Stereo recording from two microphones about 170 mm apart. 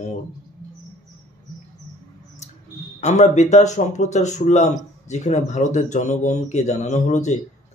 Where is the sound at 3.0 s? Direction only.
45° left (ahead or behind).